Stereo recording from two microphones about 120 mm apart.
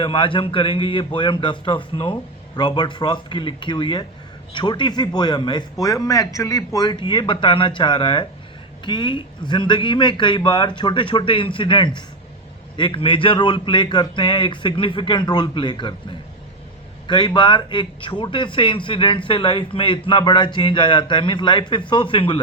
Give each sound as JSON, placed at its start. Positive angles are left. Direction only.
{"t": 0.0, "sound": "a man's voice", "side_deg": 45}
{"t": 17.1, "sound": "a man's voice", "side_deg": 40}